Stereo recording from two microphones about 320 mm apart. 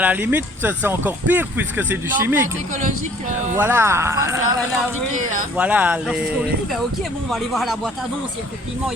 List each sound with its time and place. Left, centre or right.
0.0 s speech: centre
3.6 s speech: centre
5.1 s speech: right
5.5 s speech: centre